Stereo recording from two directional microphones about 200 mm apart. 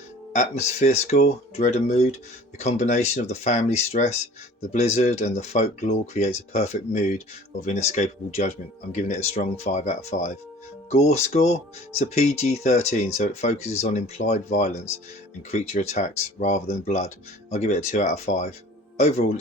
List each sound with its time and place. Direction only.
0.3 s speech: 35° left (ahead or behind)